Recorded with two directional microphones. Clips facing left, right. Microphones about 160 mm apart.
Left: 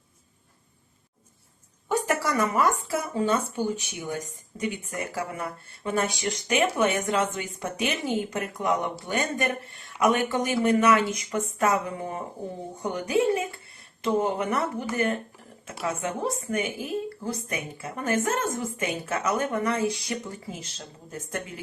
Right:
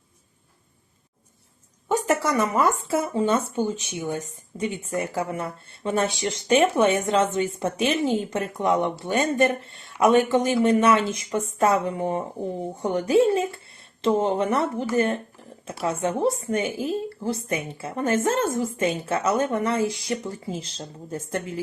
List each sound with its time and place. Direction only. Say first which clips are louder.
1.9 s speech: right 3 dB; 25° right (ahead or behind)